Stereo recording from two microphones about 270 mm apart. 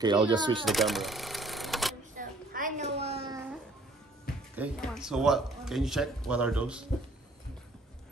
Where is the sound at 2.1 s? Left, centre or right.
Right.